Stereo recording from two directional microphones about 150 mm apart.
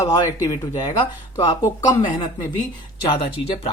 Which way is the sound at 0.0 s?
20° left (ahead or behind).